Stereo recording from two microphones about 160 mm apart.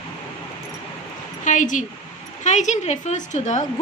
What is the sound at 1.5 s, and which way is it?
A woman's voice, 50° left (ahead or behind).